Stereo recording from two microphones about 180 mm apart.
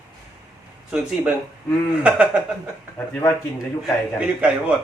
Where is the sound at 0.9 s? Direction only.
5° right (ahead or behind).